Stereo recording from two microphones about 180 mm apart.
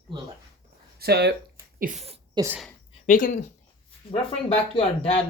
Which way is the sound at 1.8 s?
40° right (ahead or behind).